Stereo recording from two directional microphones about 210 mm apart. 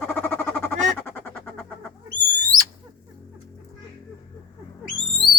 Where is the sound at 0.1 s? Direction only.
10° left (ahead or behind).